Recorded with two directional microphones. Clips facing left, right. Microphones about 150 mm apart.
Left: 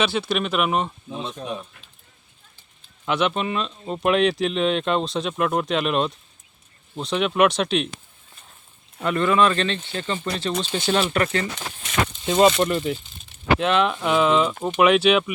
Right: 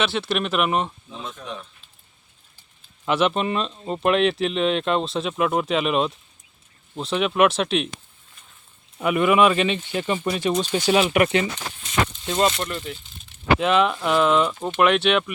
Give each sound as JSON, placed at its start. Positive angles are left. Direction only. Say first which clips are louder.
{"t": 0.0, "sound": "speech", "louder": "left 1 dB", "side_deg": 0}
{"t": 1.2, "sound": "speech", "louder": "left 3 dB", "side_deg": 30}
{"t": 3.1, "sound": "speech", "louder": "right 2 dB", "side_deg": 0}
{"t": 9.0, "sound": "speech", "louder": "right 2 dB", "side_deg": -10}
{"t": 12.2, "sound": "speech", "louder": "left 8 dB", "side_deg": 10}